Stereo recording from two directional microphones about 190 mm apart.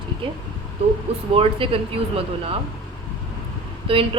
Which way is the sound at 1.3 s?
30° right (ahead or behind).